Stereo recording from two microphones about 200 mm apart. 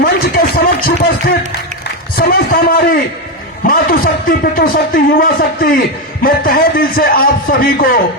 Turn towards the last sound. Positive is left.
turn(degrees=45)  # may be behind; listen again after turning